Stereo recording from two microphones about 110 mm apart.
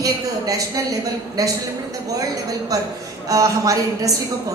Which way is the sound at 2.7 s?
30° right (ahead or behind).